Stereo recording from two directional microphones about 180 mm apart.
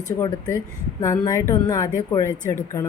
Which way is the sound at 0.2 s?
20° left (ahead or behind).